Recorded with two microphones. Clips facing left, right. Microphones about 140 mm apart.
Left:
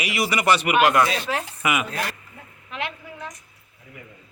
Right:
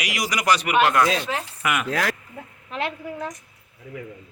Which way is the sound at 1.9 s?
90° right.